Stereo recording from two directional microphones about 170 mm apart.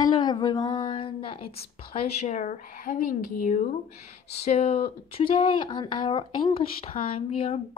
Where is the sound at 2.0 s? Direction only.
40° left (ahead or behind).